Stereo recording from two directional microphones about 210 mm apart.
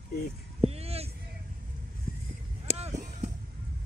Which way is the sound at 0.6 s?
30° right (ahead or behind).